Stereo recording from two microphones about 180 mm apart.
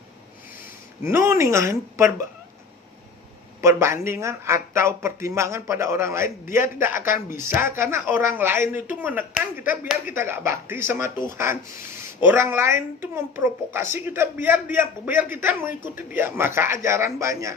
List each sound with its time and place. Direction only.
1.0 s speech: 15° right (ahead or behind)
3.6 s speech: 15° right (ahead or behind)
6.9 s speech: 50° left (ahead or behind)
7.3 s speech: 15° right (ahead or behind)